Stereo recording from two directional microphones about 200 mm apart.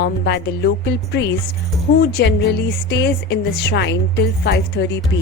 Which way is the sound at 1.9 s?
55° left (ahead or behind).